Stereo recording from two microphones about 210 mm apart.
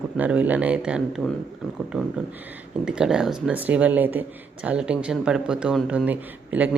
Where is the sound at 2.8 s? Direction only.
5° right (ahead or behind).